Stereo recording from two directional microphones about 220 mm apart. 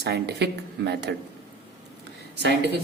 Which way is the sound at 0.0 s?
50° right (ahead or behind).